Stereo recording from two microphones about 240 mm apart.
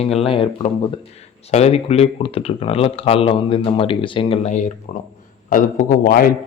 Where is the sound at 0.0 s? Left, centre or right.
Left.